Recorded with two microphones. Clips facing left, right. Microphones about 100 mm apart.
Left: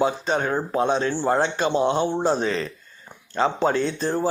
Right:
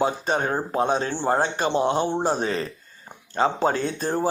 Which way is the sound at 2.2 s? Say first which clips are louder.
Left 2 dB; 40° right (ahead or behind).